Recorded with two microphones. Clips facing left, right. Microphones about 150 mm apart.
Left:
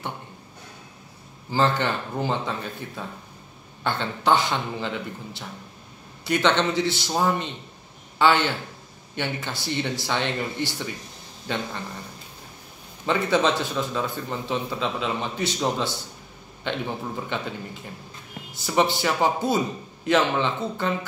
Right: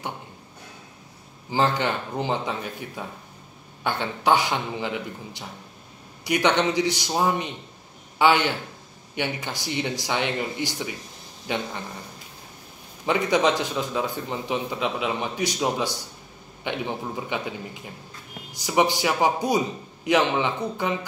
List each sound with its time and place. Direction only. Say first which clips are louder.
1.5 s a man's voice: even; 15° right (ahead or behind)
13.0 s a man's voice: right 1 dB; 15° right (ahead or behind)